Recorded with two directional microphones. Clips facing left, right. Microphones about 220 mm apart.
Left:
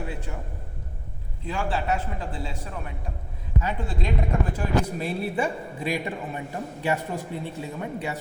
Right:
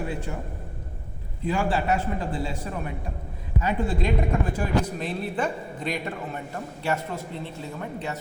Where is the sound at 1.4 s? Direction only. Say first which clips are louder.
Right 4 dB; 5° right (ahead or behind).